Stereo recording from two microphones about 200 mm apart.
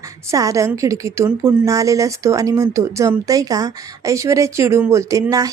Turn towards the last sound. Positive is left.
turn(degrees=-15)  # may be behind; listen again after turning